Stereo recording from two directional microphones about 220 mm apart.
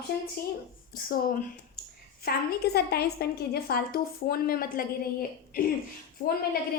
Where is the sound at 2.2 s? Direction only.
45° left (ahead or behind).